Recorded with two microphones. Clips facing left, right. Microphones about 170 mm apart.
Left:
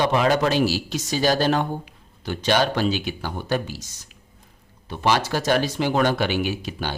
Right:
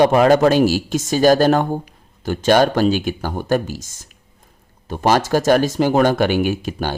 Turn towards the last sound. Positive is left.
turn(degrees=-50)  # may be behind; listen again after turning